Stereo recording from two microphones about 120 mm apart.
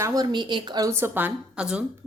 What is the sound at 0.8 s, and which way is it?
A woman's voice, 20° right (ahead or behind).